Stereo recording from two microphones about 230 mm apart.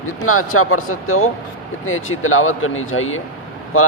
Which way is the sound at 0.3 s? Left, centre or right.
Left.